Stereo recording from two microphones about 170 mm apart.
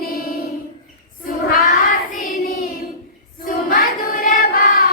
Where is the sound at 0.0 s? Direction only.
65° left (ahead or behind).